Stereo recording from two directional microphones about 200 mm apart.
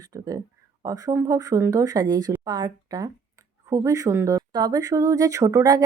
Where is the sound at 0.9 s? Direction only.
20° right (ahead or behind).